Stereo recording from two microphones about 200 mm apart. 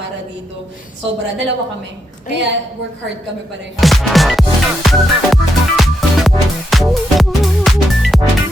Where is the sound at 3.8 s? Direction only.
Centre (ahead or behind).